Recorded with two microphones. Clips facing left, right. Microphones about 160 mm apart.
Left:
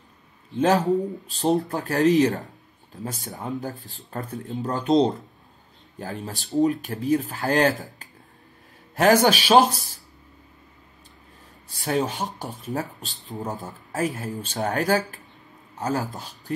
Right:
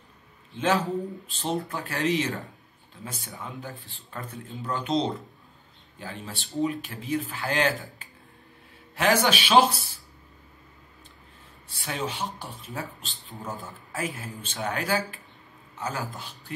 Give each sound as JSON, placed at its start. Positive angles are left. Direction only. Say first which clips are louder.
{"t": 0.6, "sound": "speech", "louder": "left 6 dB", "side_deg": 40}
{"t": 8.9, "sound": "speech", "louder": "left 6 dB", "side_deg": 40}
{"t": 11.7, "sound": "a man's voice", "louder": "left 7 dB", "side_deg": 40}